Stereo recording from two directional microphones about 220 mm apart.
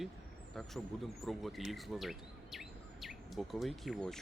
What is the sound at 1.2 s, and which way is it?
Speech, centre (ahead or behind).